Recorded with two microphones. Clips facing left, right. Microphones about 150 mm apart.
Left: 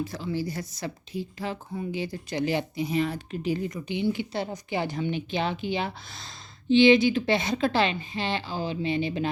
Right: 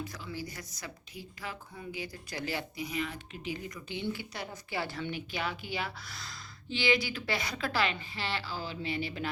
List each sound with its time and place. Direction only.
0.0 s speech: 30° left (ahead or behind)
3.7 s speech: 20° left (ahead or behind)